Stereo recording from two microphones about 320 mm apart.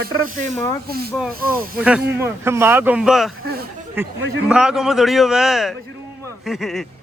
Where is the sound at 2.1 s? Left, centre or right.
Centre.